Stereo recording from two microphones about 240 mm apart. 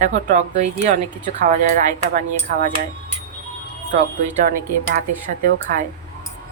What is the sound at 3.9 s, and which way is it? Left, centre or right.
Speech, right.